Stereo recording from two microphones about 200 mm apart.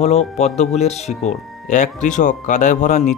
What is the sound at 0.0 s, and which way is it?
Speech, 30° left (ahead or behind).